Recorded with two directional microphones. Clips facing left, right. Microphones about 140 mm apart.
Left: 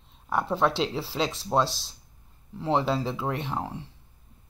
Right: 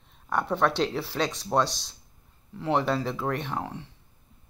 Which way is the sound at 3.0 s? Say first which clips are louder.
Even; 5° left (ahead or behind).